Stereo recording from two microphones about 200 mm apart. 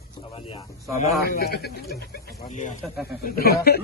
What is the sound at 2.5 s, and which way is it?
Speech, 40° left (ahead or behind).